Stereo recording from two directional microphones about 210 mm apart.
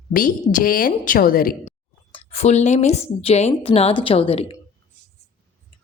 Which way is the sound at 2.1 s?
30° left (ahead or behind).